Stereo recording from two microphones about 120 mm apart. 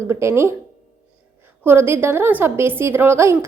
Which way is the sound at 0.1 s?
20° right (ahead or behind).